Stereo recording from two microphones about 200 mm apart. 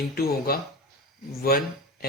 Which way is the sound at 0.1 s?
50° left (ahead or behind).